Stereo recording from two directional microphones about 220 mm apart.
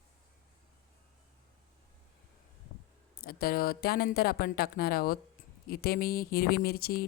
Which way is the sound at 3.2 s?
45° left (ahead or behind).